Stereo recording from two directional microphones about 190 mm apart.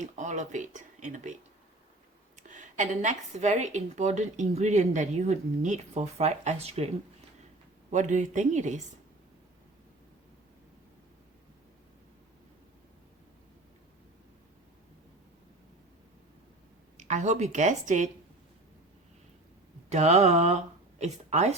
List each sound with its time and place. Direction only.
0.0 s a woman's voice: 40° right (ahead or behind)
2.5 s a woman's voice: 40° right (ahead or behind)
17.0 s a woman's voice: 40° right (ahead or behind)
19.9 s a woman's voice: 35° right (ahead or behind)